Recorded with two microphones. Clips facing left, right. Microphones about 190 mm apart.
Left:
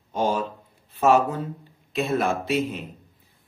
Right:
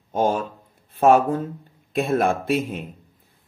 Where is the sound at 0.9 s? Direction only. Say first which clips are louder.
Right 3 dB; 50° right (ahead or behind).